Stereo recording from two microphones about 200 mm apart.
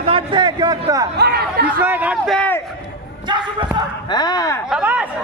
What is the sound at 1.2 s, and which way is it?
Chatter, 55° right (ahead or behind).